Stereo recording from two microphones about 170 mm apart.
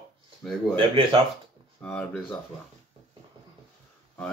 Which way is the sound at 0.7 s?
30° right (ahead or behind).